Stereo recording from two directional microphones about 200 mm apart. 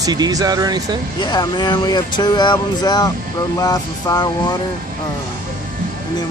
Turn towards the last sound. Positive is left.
turn(degrees=20)  # may be behind; listen again after turning